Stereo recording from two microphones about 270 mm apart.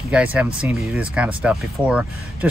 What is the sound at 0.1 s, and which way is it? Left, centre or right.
Speech, centre.